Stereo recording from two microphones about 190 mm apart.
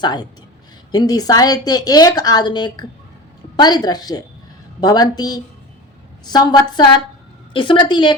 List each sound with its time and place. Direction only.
0.0 s a woman's voice: 20° left (ahead or behind)